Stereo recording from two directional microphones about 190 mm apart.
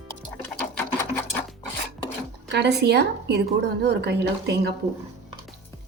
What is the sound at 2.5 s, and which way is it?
Speech, 60° right (ahead or behind).